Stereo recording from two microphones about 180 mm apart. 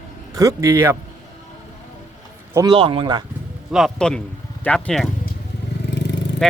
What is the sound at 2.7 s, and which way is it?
Speech, 30° right (ahead or behind).